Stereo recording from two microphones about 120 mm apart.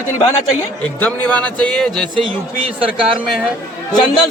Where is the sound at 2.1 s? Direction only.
45° right (ahead or behind).